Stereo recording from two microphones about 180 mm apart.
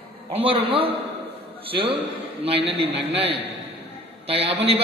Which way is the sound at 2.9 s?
70° right (ahead or behind).